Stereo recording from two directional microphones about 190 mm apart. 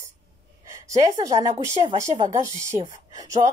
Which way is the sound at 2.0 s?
15° right (ahead or behind).